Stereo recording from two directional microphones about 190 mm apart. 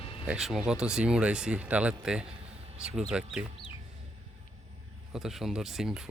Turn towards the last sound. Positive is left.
turn(degrees=0)  # may be behind; listen again after turning